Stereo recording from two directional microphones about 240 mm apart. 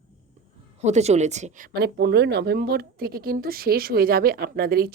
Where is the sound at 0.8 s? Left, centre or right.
Right.